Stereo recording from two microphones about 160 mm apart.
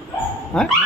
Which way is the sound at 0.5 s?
5° left (ahead or behind).